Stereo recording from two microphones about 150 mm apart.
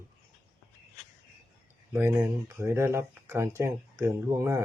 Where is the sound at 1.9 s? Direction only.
15° right (ahead or behind).